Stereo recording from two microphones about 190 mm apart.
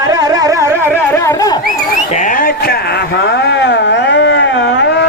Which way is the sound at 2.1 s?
45° left (ahead or behind).